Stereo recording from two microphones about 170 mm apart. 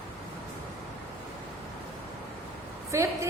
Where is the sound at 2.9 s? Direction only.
15° right (ahead or behind).